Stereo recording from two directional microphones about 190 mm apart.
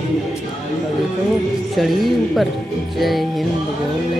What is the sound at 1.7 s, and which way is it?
Speech, centre (ahead or behind).